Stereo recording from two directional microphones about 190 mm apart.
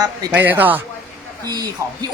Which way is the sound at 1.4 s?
20° right (ahead or behind).